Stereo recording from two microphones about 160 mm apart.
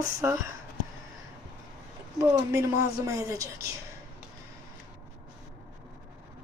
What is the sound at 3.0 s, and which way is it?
Speech, 20° right (ahead or behind).